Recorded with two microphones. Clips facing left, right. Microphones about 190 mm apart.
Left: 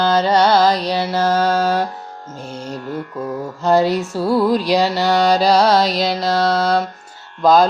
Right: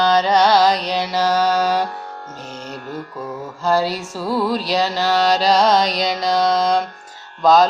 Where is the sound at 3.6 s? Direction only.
20° left (ahead or behind).